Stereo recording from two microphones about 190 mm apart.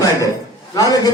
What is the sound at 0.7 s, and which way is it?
Speech, 20° left (ahead or behind).